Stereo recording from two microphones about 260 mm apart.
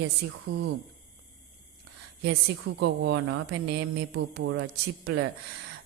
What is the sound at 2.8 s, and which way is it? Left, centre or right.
Speech, right.